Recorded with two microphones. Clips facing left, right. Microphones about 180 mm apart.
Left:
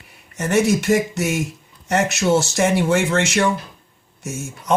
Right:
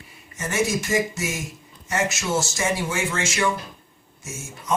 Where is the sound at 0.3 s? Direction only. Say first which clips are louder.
Left 7 dB; 65° left (ahead or behind).